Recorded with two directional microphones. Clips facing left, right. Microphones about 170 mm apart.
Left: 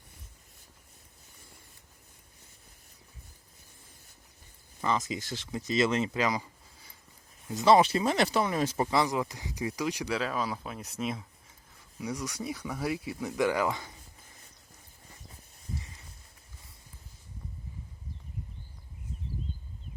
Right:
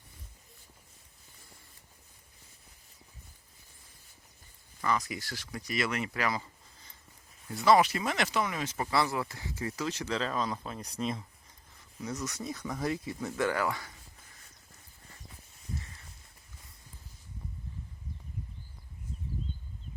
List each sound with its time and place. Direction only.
4.8 s speech: 20° left (ahead or behind)
7.4 s speech: 20° left (ahead or behind)
8.9 s speech: 15° left (ahead or behind)